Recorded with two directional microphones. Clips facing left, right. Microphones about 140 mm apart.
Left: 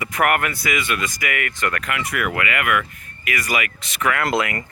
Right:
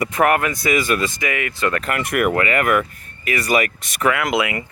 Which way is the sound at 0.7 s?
35° right (ahead or behind).